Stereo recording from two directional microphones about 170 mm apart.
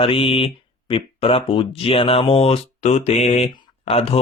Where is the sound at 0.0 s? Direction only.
35° left (ahead or behind).